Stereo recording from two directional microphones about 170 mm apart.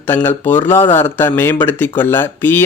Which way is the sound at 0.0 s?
10° left (ahead or behind).